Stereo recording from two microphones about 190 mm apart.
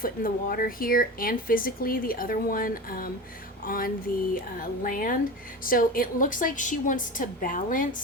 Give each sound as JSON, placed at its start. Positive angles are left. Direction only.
{"t": 0.0, "sound": "speech", "side_deg": 50}